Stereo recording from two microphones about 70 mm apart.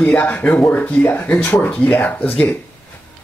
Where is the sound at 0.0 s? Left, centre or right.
Left.